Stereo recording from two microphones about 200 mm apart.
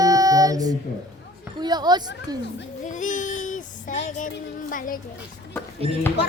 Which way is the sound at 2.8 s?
40° left (ahead or behind).